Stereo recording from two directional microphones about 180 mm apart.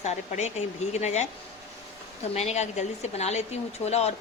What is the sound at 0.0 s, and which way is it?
Speech, 40° left (ahead or behind).